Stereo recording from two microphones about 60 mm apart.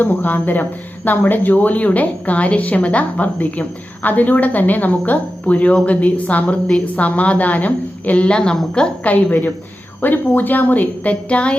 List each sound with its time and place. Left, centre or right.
0.0 s speech: left; by 8.9 s centre
9.0 s speech: left